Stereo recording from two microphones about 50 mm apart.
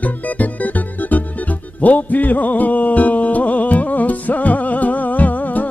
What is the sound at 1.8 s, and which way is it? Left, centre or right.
Music, left.